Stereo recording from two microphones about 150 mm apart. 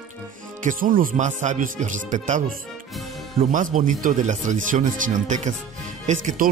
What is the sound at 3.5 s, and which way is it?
Speech, 60° right (ahead or behind).